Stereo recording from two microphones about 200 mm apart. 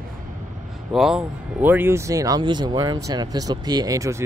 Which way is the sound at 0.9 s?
Centre (ahead or behind).